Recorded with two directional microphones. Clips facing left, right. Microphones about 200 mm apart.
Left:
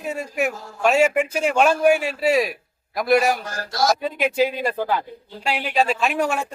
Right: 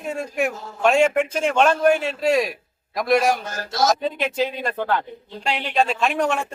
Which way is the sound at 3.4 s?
25° right (ahead or behind).